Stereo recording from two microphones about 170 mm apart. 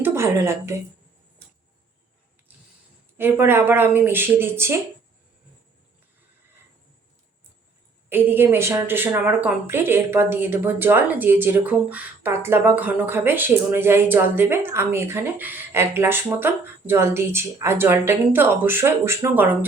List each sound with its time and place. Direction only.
0.0 s speech: 15° right (ahead or behind)
3.2 s a woman's voice: 15° right (ahead or behind)
8.1 s a woman's voice: 10° right (ahead or behind)